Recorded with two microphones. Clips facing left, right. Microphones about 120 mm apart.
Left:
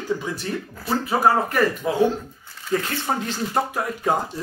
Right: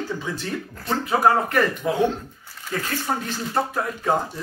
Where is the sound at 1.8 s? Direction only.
20° left (ahead or behind).